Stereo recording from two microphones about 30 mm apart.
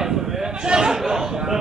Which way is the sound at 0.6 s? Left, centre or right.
Right.